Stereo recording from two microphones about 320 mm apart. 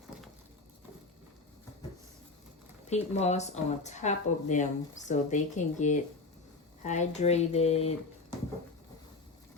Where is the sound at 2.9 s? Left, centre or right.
Left.